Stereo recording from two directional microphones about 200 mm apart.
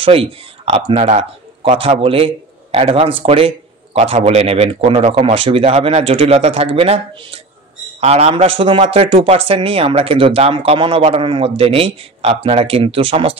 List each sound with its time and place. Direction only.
0.0 s speech: 30° right (ahead or behind)